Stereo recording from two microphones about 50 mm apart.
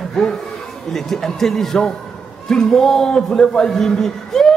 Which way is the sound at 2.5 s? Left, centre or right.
Centre.